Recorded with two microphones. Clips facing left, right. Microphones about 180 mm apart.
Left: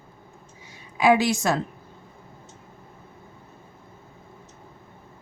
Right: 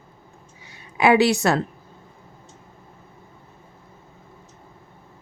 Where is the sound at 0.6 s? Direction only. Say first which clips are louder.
Right 1 dB; 65° right (ahead or behind).